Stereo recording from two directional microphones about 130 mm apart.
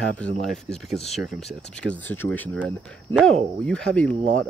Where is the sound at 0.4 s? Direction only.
5° left (ahead or behind).